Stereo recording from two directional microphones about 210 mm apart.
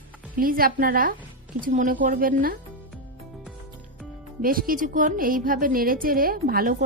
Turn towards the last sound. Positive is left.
turn(degrees=-45)  # may be behind; listen again after turning